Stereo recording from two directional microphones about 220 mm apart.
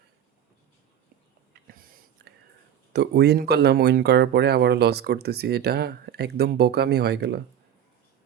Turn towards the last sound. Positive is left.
turn(degrees=-50)  # may be behind; listen again after turning